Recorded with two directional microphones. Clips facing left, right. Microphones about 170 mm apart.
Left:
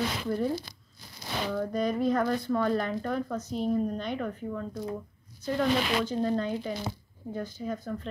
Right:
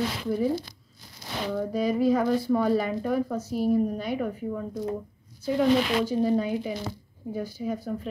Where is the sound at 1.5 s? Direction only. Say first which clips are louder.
Right 3 dB; 5° right (ahead or behind).